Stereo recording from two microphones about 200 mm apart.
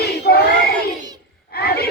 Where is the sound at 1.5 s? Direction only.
50° left (ahead or behind).